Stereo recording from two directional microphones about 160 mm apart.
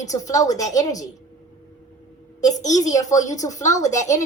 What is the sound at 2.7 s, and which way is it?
A woman's voice, 20° left (ahead or behind).